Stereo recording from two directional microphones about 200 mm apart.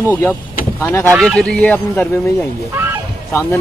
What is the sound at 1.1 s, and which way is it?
Speech, centre (ahead or behind).